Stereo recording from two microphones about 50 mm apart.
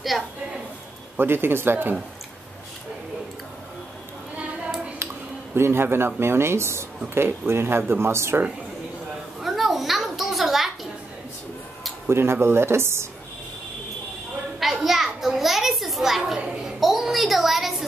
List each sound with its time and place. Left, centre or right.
0.1 s a woman's voice: centre
1.1 s speech: right
5.5 s speech: right
9.4 s a sound: centre
12.1 s speech: right
14.6 s a sound: centre